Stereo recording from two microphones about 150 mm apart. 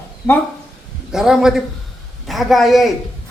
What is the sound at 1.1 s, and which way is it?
A woman's voice, 5° right (ahead or behind).